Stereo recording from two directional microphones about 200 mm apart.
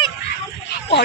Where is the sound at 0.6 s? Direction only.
60° left (ahead or behind).